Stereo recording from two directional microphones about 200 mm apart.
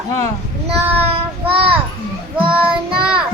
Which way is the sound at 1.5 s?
25° right (ahead or behind).